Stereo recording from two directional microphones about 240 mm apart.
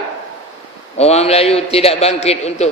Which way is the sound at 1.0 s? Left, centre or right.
Left.